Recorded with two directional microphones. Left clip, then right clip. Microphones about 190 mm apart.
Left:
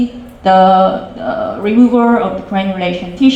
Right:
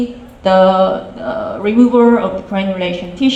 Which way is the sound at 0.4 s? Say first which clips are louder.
Left 2 dB; 50° right (ahead or behind).